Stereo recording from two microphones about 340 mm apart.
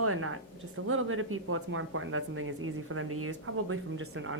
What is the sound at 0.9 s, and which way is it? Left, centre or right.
A woman's voice, right.